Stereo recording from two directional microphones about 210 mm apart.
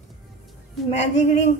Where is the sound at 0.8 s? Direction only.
30° left (ahead or behind).